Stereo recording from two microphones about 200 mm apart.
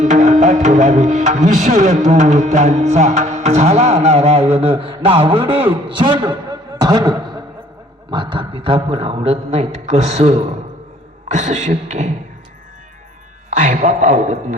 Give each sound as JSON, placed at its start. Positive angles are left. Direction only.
{"t": 0.0, "sound": "music", "side_deg": -35}
{"t": 5.9, "sound": "a man's voice", "side_deg": -25}
{"t": 8.1, "sound": "music", "side_deg": -25}
{"t": 13.5, "sound": "music", "side_deg": -40}